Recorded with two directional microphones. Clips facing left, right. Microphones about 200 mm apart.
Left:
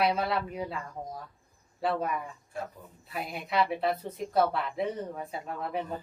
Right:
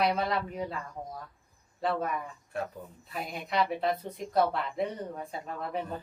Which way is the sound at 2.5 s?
65° right (ahead or behind).